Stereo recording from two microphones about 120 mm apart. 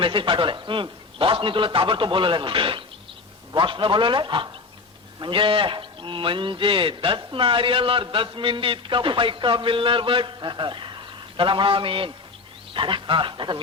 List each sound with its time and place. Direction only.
0.0 s a man's voice: 45° right (ahead or behind)